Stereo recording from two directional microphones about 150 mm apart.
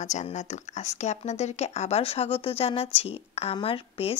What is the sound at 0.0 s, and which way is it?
A woman's voice, 50° left (ahead or behind).